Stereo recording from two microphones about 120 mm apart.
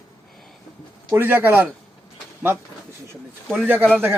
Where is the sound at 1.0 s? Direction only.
15° right (ahead or behind).